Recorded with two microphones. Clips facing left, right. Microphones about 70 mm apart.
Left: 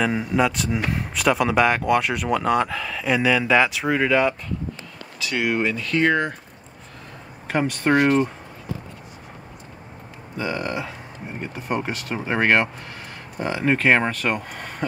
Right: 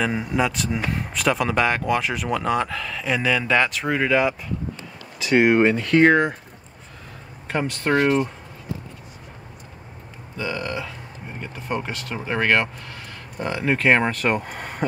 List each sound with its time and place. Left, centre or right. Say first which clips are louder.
0.0 s speech: left 2 dB; centre
5.2 s speech: right 6 dB; right
7.5 s speech: left 2 dB; centre
10.3 s speech: left 1 dB; left
13.4 s speech: left 1 dB; centre
14.8 s a sound: right 2 dB; centre